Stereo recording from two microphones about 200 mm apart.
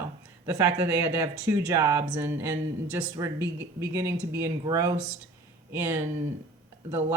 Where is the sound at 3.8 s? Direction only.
15° right (ahead or behind).